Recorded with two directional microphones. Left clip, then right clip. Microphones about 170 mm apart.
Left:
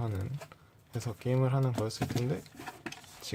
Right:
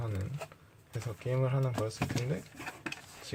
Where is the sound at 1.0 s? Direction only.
35° left (ahead or behind).